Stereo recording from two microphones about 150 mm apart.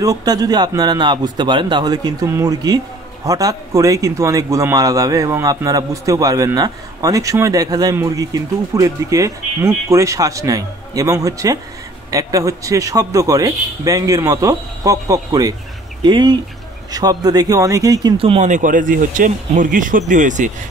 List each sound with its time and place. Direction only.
0.0 s speech: 25° right (ahead or behind)
18.1 s speech: 35° right (ahead or behind)
18.4 s speech: 55° right (ahead or behind)